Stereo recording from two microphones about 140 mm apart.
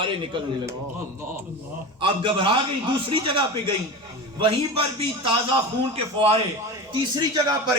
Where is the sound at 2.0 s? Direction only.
40° right (ahead or behind).